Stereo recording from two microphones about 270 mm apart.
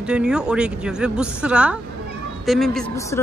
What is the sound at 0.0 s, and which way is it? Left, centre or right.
Speech, centre.